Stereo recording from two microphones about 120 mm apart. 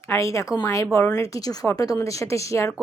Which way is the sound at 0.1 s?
25° left (ahead or behind).